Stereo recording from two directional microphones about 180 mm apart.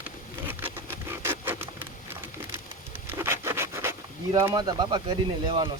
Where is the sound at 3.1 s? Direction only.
15° right (ahead or behind).